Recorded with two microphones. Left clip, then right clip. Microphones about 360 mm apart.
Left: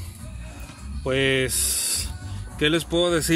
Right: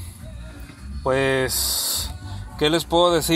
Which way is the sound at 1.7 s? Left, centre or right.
Right.